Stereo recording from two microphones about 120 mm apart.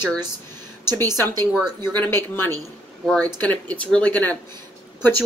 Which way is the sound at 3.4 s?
10° left (ahead or behind).